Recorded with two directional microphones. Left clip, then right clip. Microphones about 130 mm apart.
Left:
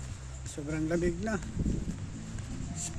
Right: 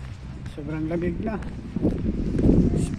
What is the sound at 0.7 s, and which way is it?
Speech, 40° left (ahead or behind).